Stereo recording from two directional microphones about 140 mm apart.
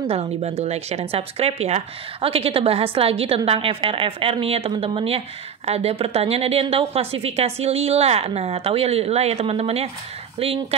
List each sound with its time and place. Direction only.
0.0 s a woman's voice: 45° right (ahead or behind)